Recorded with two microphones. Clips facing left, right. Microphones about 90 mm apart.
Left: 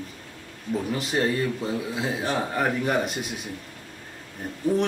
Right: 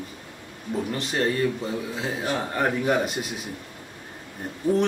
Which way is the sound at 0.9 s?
5° left (ahead or behind).